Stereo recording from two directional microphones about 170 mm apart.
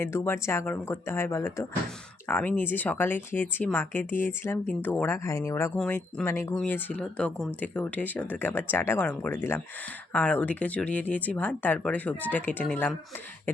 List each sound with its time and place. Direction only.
0.0 s speech: 15° left (ahead or behind)
5.7 s speech: 5° left (ahead or behind)
6.2 s speech: 15° left (ahead or behind)